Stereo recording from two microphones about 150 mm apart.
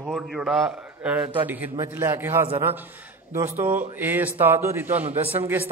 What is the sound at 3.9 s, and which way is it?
Speech, 15° right (ahead or behind).